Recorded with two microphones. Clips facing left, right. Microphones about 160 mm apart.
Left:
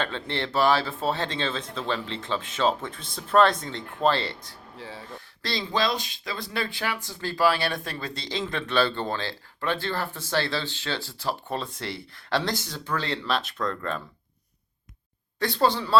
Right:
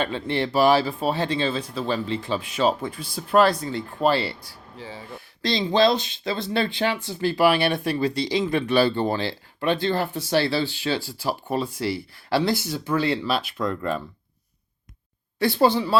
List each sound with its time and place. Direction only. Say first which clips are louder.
0.0 s speech: right 5 dB; 10° right (ahead or behind)
5.4 s speech: right 8 dB; 20° right (ahead or behind)
15.4 s speech: right 4 dB; 10° right (ahead or behind)